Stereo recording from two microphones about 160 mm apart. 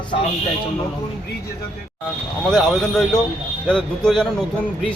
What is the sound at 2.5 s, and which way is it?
A man's voice, centre (ahead or behind).